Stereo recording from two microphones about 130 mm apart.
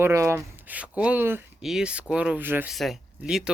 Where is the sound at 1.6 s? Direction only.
5° right (ahead or behind).